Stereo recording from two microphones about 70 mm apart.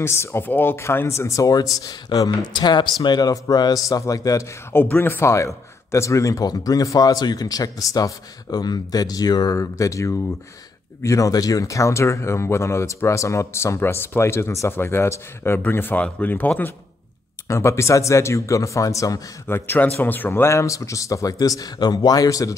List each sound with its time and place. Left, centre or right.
0.0 s speech: left
4.0 s speech: left
4.7 s speech: left
6.4 s speech: left
9.5 s speech: left
17.5 s speech: left
19.4 s speech: left
20.5 s speech: left